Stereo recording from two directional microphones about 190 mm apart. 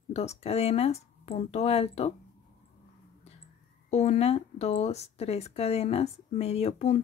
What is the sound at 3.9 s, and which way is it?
Speech, 35° left (ahead or behind).